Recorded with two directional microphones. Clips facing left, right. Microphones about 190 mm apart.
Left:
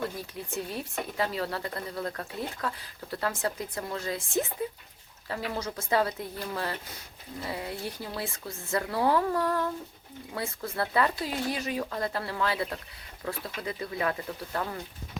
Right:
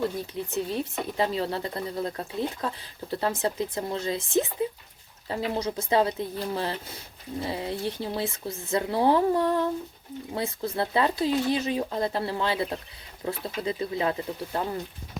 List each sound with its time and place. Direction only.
0.5 s speech: 25° right (ahead or behind)